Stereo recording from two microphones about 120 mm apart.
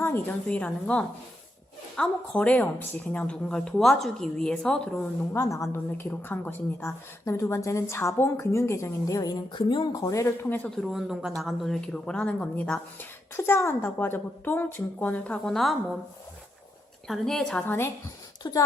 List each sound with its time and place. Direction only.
0.0 s a woman's voice: 15° left (ahead or behind)
5.3 s a woman's voice: 25° left (ahead or behind)
10.8 s speech: centre (ahead or behind)
13.3 s a woman's voice: 20° left (ahead or behind); by 16.0 s centre (ahead or behind)
17.1 s speech: centre (ahead or behind)
17.7 s a woman's voice: 20° left (ahead or behind)
18.4 s speech: 30° left (ahead or behind)